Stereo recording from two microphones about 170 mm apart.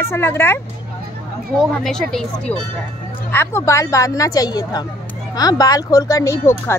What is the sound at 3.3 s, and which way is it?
Speech, 15° left (ahead or behind).